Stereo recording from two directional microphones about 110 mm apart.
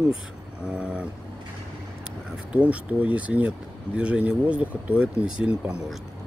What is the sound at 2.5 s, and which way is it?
Speech, 15° right (ahead or behind).